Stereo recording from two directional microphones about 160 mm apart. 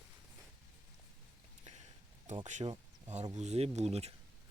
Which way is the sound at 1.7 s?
45° right (ahead or behind).